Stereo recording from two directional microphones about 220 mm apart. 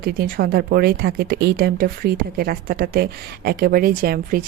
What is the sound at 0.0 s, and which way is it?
Speech, 40° right (ahead or behind).